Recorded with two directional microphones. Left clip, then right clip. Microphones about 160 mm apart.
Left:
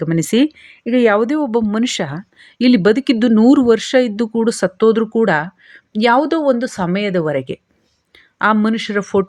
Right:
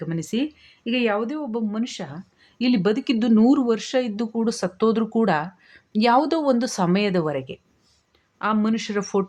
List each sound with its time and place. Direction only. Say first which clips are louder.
0.0 s speech: left 11 dB; 50° left (ahead or behind)
2.4 s speech: left 9 dB; 35° left (ahead or behind); by 7.3 s 15° left (ahead or behind)
7.3 s speech: left 9 dB; 35° left (ahead or behind)
8.1 s a sound: left 10 dB; 40° left (ahead or behind)
8.6 s speech: left 7 dB; 25° left (ahead or behind)